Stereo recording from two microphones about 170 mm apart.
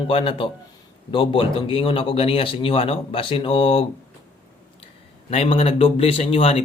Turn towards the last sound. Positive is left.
turn(degrees=35)  # may be behind; listen again after turning